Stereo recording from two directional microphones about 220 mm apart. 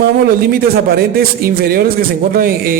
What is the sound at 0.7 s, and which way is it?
A man's voice, 45° right (ahead or behind).